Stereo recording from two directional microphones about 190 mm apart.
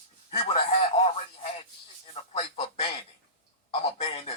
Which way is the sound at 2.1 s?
30° left (ahead or behind).